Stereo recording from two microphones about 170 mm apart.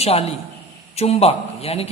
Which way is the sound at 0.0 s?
35° left (ahead or behind).